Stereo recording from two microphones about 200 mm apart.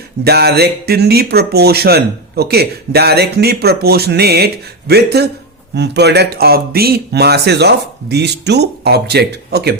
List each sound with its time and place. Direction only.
0.3 s speech: 55° right (ahead or behind)